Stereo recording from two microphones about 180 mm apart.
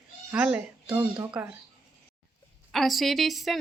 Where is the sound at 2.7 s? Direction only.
Centre (ahead or behind).